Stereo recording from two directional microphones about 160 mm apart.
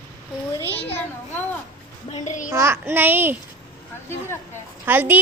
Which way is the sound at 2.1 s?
50° left (ahead or behind).